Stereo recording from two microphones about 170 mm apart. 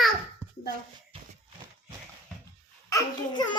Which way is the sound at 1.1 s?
35° right (ahead or behind).